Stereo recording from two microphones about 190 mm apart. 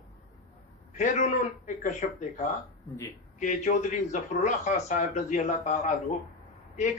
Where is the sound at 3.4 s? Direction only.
40° left (ahead or behind).